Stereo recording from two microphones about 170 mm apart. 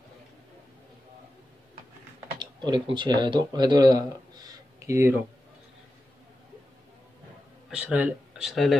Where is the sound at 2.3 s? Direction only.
25° right (ahead or behind).